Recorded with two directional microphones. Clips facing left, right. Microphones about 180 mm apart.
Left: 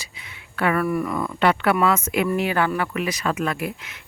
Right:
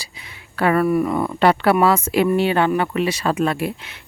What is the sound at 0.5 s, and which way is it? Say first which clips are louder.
Speech: right 5 dB; 35° right (ahead or behind).